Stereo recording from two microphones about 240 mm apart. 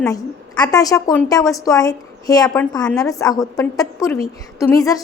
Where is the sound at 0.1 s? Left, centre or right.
Centre.